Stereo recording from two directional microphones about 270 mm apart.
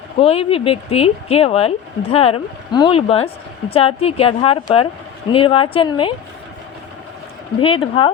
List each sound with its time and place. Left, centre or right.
0.2 s speech: left
7.6 s speech: centre